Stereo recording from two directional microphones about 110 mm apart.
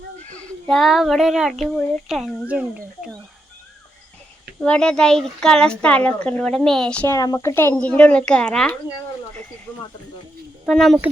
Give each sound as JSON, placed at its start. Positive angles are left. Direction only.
{"t": 0.3, "sound": "a child's voice", "side_deg": 5}
{"t": 4.6, "sound": "speech", "side_deg": 10}
{"t": 7.1, "sound": "speech", "side_deg": 30}
{"t": 7.8, "sound": "speech", "side_deg": 10}
{"t": 10.7, "sound": "a child's voice", "side_deg": 0}